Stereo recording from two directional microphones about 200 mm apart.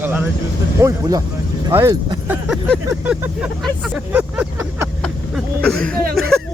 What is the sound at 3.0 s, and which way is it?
Speech, 5° right (ahead or behind).